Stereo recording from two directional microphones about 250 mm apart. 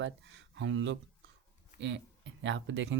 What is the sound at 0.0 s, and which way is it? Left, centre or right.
Speech, right.